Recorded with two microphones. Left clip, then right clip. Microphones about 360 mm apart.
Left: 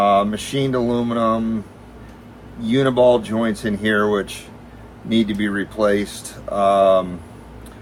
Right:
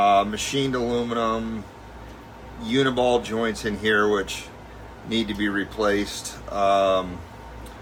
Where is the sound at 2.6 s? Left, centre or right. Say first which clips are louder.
Left 6 dB; centre.